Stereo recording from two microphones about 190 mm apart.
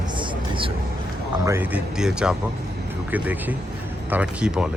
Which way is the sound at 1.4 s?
10° right (ahead or behind).